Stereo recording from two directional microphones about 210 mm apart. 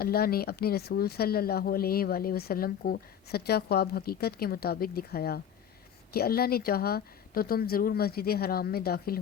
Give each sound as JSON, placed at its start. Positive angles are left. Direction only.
{"t": 0.0, "sound": "speech", "side_deg": 45}